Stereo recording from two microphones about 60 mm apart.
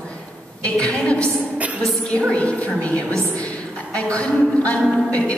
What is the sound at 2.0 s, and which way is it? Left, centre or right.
Speech, centre.